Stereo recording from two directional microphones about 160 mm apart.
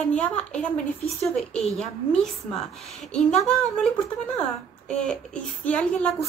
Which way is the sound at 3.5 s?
5° left (ahead or behind).